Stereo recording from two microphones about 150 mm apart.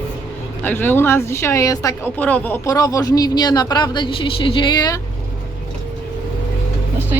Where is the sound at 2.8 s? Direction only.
25° left (ahead or behind).